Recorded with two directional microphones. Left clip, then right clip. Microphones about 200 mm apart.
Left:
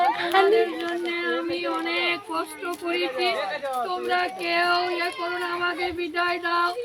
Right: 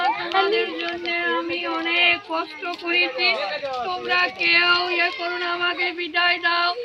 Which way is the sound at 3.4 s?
40° right (ahead or behind).